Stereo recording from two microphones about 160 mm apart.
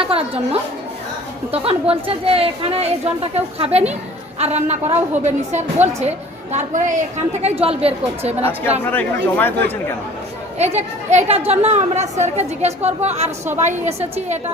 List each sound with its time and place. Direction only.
0.0 s a woman's voice: 35° right (ahead or behind)
7.4 s a woman's voice: 40° right (ahead or behind)
9.3 s speech: 10° left (ahead or behind)
10.6 s speech: 45° right (ahead or behind)